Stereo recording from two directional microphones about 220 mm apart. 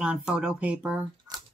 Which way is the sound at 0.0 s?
5° right (ahead or behind).